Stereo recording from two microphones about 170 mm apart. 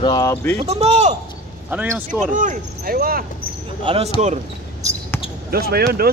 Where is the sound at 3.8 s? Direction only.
35° right (ahead or behind).